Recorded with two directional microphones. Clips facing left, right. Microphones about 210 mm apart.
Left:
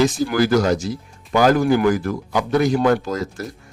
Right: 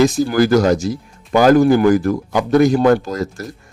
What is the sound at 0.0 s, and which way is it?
Speech, 40° right (ahead or behind).